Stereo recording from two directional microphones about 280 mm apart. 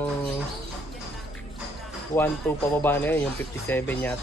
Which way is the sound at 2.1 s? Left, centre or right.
Centre.